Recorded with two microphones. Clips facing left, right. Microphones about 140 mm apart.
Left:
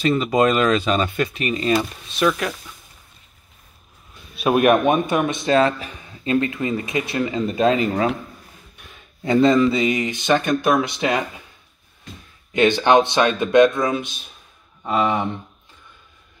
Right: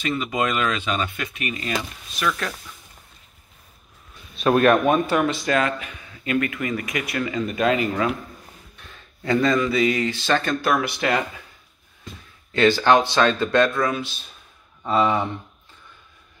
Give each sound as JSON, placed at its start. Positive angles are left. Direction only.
{"t": 0.0, "sound": "speech", "side_deg": 35}
{"t": 4.4, "sound": "speech", "side_deg": 15}
{"t": 12.5, "sound": "speech", "side_deg": 20}